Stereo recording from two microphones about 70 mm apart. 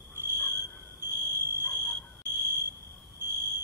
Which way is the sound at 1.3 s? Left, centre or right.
Right.